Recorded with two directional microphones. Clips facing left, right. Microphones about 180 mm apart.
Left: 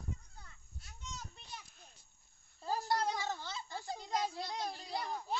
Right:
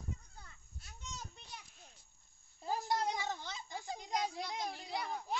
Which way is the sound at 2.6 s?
20° right (ahead or behind).